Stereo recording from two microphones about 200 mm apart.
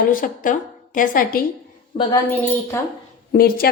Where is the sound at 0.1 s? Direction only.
45° left (ahead or behind).